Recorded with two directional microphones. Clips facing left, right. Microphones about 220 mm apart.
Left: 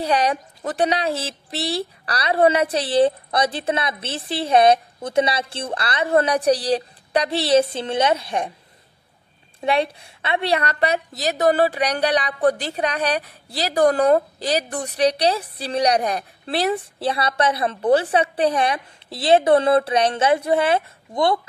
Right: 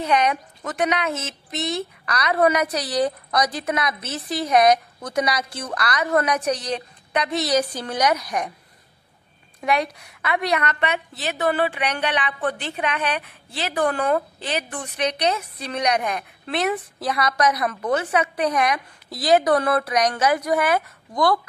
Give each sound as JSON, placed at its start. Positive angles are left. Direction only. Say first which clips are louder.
{"t": 0.0, "sound": "speech", "louder": "left 1 dB", "side_deg": 35}
{"t": 9.6, "sound": "a woman's voice", "louder": "left 2 dB", "side_deg": 30}